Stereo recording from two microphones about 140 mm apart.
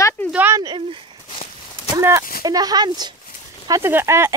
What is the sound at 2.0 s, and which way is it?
Speech, 20° right (ahead or behind).